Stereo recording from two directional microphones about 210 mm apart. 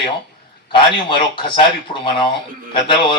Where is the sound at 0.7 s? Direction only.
25° left (ahead or behind).